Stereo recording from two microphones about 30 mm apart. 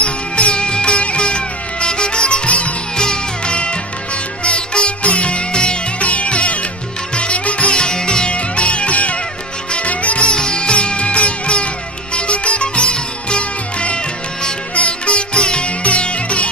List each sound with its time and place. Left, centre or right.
0.0 s music: left
0.6 s music: left
5.9 s music: left
7.7 s music: left
8.3 s music: left
10.3 s music: left
15.8 s music: left